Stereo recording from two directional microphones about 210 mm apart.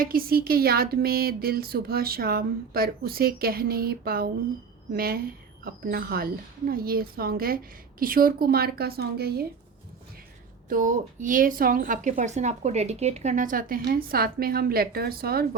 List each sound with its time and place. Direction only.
0.0 s speech: 45° right (ahead or behind)
10.7 s a woman's voice: 40° right (ahead or behind)